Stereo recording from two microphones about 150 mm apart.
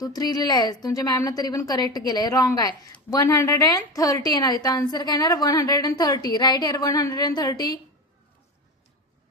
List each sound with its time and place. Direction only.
0.0 s a woman's voice: 25° left (ahead or behind)